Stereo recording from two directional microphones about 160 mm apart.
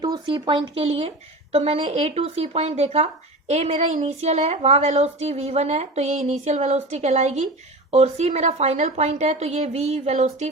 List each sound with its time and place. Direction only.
0.0 s a woman's voice: 25° right (ahead or behind); by 10.5 s 45° right (ahead or behind)